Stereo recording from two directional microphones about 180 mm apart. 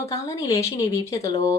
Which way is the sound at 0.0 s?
20° left (ahead or behind).